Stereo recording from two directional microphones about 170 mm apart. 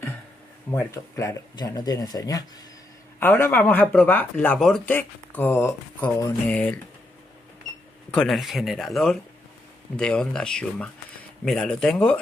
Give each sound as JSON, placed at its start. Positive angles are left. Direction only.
{"t": 0.7, "sound": "speech", "side_deg": 15}
{"t": 8.1, "sound": "speech", "side_deg": 5}